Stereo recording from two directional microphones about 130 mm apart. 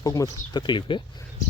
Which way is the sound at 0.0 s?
30° left (ahead or behind).